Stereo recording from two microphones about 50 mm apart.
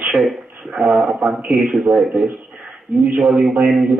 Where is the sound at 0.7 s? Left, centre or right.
Centre.